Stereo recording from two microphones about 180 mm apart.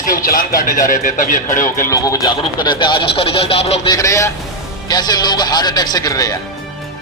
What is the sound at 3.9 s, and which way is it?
A man's voice, 15° left (ahead or behind).